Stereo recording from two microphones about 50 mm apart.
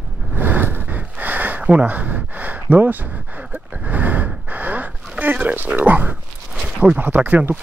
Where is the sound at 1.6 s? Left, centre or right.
Right.